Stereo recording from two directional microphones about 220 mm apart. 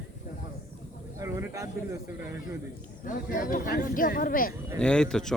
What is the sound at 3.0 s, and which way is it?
Speech, 40° left (ahead or behind).